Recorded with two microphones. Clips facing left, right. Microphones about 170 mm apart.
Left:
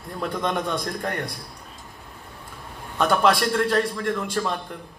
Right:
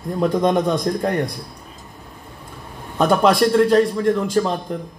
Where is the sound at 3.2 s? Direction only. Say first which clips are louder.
Right 9 dB; 25° right (ahead or behind).